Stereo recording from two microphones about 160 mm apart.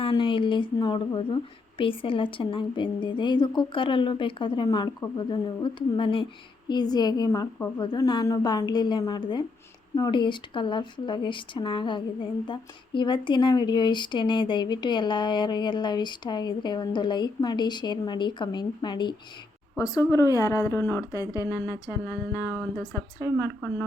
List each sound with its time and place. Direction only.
0.0 s a woman's voice: 30° left (ahead or behind)
23.4 s speech: 15° left (ahead or behind)